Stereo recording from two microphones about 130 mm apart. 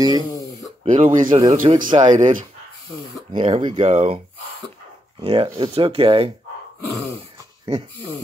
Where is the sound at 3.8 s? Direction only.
50° right (ahead or behind).